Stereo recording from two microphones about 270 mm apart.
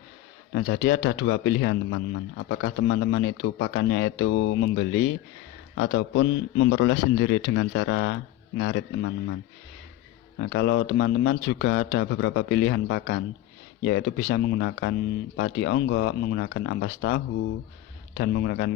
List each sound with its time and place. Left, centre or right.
0.5 s speech: left